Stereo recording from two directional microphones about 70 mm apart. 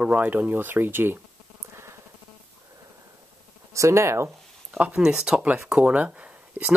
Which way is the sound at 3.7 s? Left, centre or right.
Right.